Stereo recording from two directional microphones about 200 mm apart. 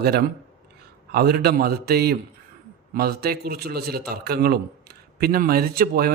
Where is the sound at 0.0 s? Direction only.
50° right (ahead or behind).